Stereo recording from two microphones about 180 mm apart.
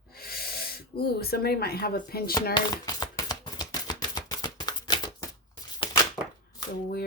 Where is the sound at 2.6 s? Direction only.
20° left (ahead or behind).